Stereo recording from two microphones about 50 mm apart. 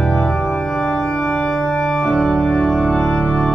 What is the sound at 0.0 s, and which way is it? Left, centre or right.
Organ, centre.